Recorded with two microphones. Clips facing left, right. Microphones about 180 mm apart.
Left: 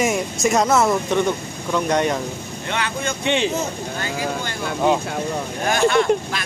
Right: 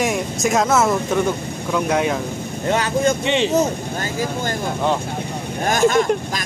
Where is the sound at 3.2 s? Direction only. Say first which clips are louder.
Right 1 dB; centre (ahead or behind).